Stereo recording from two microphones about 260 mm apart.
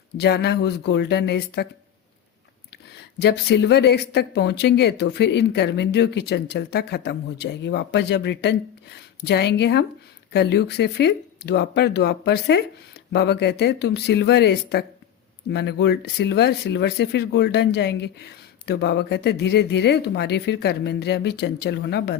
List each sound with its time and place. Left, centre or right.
0.2 s speech: left
2.9 s speech: left